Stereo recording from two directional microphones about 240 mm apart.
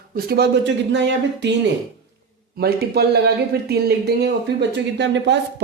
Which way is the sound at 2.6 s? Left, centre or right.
Right.